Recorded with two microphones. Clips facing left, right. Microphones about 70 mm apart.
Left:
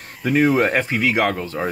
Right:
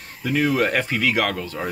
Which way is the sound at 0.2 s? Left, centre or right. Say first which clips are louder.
Left 4 dB; left.